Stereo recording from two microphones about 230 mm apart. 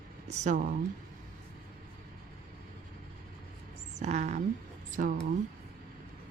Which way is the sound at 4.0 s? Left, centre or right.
Right.